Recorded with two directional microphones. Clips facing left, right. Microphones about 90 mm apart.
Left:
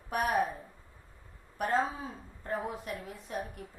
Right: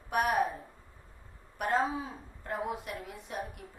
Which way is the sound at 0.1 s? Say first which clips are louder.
Right 2 dB; 35° left (ahead or behind).